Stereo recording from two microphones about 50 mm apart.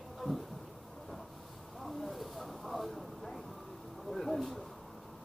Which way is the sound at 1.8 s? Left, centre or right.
Centre.